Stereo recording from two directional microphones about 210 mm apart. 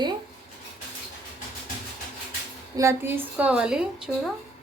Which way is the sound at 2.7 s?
10° right (ahead or behind).